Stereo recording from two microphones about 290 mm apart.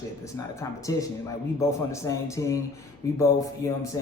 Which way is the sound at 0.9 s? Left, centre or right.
Centre.